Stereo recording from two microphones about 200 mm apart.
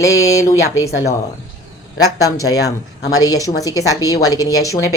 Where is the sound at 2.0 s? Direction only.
15° left (ahead or behind).